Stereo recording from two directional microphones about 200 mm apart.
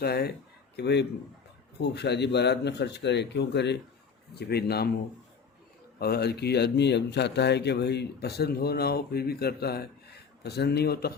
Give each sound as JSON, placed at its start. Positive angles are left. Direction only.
{"t": 0.0, "sound": "a man's voice", "side_deg": 50}
{"t": 6.0, "sound": "speech", "side_deg": 50}